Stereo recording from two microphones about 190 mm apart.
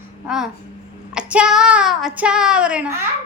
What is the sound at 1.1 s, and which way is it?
A child's voice, 5° right (ahead or behind).